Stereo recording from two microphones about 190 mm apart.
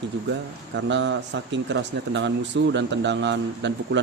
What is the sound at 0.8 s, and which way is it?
Speech, 70° right (ahead or behind).